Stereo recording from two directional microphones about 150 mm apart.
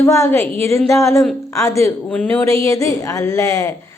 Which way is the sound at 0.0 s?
15° left (ahead or behind).